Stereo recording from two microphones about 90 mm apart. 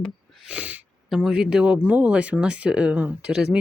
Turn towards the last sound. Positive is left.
turn(degrees=-10)  # may be behind; listen again after turning